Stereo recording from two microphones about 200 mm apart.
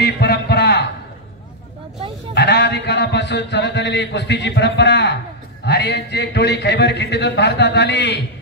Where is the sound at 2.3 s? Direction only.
60° left (ahead or behind).